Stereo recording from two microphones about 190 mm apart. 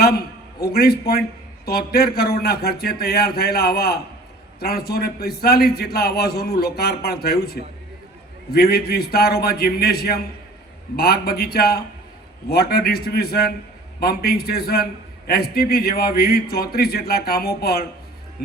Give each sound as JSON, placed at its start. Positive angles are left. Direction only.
{"t": 0.0, "sound": "a man's voice", "side_deg": 55}